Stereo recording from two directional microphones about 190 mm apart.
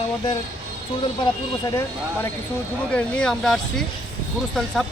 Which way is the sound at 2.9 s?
5° left (ahead or behind).